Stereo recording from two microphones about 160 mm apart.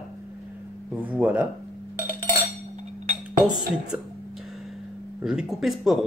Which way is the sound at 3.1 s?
60° right (ahead or behind).